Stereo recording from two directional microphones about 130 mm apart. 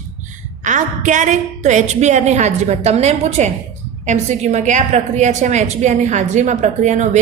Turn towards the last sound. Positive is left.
turn(degrees=-65)  # may be behind; listen again after turning